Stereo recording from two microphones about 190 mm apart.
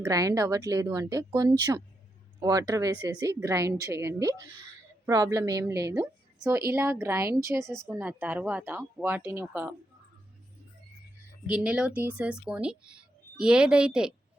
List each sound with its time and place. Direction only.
0.0 s a woman's voice: 15° right (ahead or behind)
11.4 s speech: 5° right (ahead or behind)